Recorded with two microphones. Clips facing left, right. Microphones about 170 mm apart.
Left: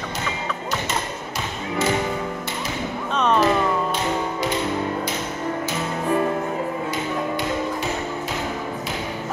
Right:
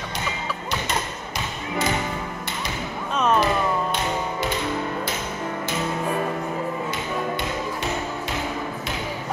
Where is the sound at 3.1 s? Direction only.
5° right (ahead or behind).